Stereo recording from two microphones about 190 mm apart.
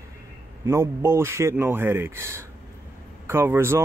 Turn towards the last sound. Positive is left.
turn(degrees=-15)  # may be behind; listen again after turning